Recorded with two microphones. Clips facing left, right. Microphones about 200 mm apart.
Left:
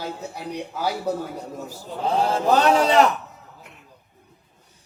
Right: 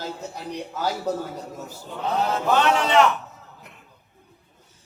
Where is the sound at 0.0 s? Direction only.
10° left (ahead or behind).